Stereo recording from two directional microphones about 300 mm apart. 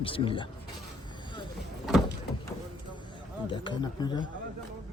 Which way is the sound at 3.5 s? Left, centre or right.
Centre.